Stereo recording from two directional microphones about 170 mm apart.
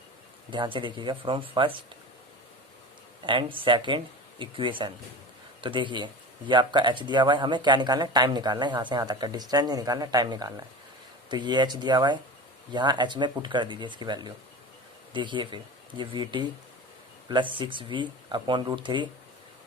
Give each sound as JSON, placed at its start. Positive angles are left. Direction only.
{"t": 0.5, "sound": "speech", "side_deg": -30}
{"t": 3.2, "sound": "speech", "side_deg": -30}